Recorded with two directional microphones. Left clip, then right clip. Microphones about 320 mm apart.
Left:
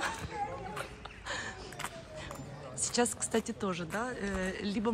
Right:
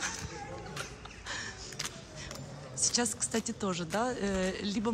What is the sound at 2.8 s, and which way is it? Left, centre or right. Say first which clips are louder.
A woman's voice: even; centre.